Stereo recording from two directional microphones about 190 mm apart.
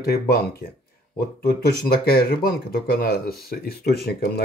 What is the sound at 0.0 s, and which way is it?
Speech, 55° left (ahead or behind).